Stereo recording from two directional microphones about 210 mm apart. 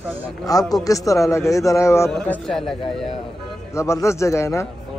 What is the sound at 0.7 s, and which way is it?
A man's voice, 15° left (ahead or behind).